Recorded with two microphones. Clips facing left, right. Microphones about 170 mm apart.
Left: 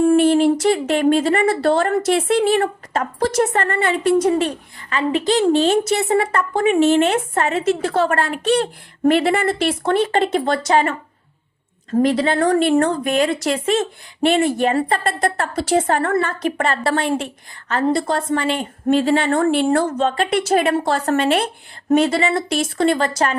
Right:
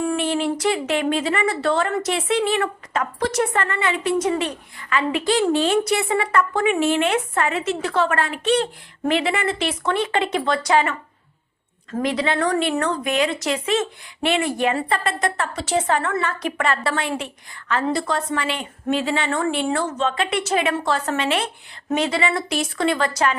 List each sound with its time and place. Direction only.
0.2 s a sound: 45° left (ahead or behind)
0.6 s a woman's voice: 45° left (ahead or behind)
17.7 s a woman's voice: 45° left (ahead or behind)